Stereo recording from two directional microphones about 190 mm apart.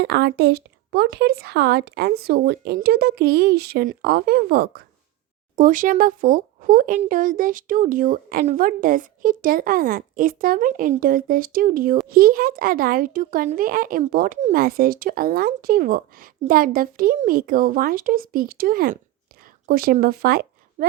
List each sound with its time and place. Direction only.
0.0 s speech: 60° right (ahead or behind)
5.5 s a child's voice: 45° right (ahead or behind)